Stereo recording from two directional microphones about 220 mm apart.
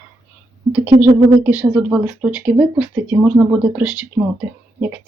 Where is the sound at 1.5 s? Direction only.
5° right (ahead or behind).